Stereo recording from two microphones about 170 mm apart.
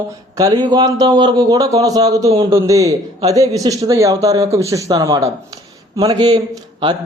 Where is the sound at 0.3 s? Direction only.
25° right (ahead or behind).